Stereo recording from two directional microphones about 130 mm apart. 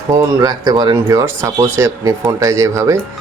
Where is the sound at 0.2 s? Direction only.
30° right (ahead or behind).